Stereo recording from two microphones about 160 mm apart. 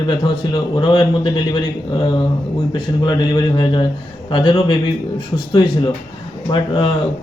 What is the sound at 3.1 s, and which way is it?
A man's voice, 30° left (ahead or behind).